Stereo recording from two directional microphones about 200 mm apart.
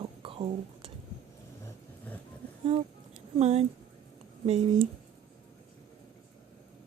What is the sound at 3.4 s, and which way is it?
Speech, 30° right (ahead or behind).